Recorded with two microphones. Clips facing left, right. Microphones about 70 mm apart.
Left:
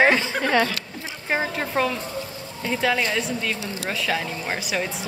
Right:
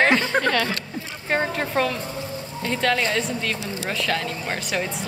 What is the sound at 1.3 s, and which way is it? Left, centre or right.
Speech, centre.